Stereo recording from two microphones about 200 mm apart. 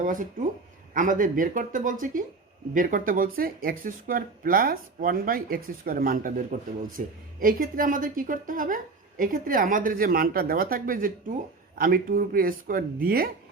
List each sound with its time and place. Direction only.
0.0 s speech: 40° right (ahead or behind)